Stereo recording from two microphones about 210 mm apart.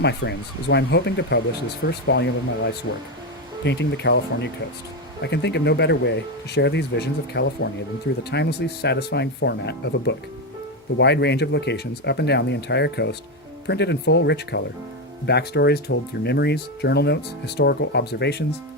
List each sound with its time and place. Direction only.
0.0 s speech: 55° left (ahead or behind)